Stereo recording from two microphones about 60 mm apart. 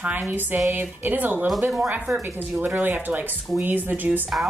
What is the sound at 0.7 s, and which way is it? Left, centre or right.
Speech, right.